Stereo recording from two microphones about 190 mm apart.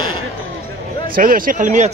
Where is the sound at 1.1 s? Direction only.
45° right (ahead or behind).